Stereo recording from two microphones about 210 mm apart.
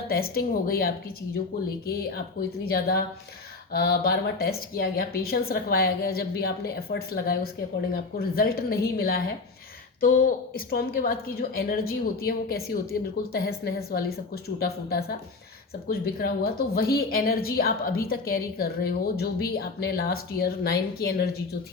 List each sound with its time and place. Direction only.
0.1 s a woman's voice: 45° left (ahead or behind)